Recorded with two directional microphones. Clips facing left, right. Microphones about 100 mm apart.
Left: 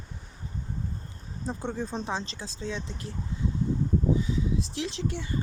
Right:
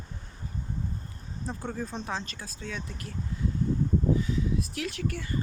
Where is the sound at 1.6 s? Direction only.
25° left (ahead or behind).